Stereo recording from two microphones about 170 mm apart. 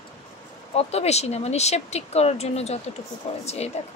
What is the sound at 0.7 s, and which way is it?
Speech, 40° left (ahead or behind).